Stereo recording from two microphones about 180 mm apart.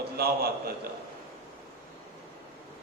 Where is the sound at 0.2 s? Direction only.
60° right (ahead or behind).